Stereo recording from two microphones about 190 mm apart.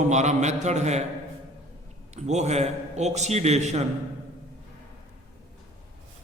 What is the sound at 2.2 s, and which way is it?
A man's voice, 35° right (ahead or behind).